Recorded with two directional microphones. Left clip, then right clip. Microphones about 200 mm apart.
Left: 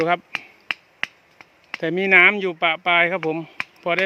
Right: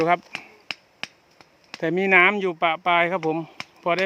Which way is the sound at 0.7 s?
15° right (ahead or behind).